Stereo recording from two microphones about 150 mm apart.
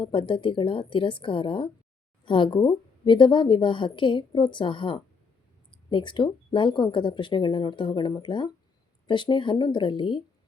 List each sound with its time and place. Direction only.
0.0 s a woman's voice: 35° left (ahead or behind)